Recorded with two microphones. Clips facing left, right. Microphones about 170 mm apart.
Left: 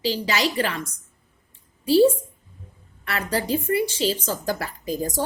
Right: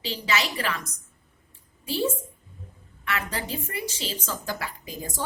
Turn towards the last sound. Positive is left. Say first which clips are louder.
# left 9 dB
turn(degrees=40)  # may be behind; listen again after turning